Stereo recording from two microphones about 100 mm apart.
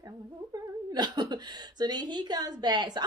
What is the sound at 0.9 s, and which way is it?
Speech, 45° right (ahead or behind).